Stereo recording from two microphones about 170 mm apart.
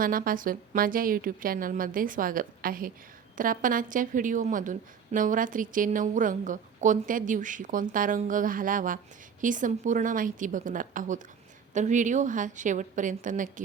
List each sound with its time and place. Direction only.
0.0 s a woman's voice: 55° right (ahead or behind)